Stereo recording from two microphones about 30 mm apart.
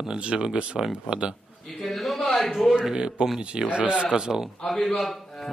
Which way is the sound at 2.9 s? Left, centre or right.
Right.